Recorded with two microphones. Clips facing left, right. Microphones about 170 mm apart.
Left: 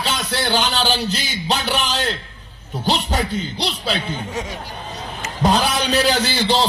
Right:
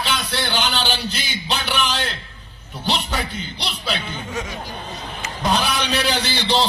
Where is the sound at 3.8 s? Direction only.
40° left (ahead or behind).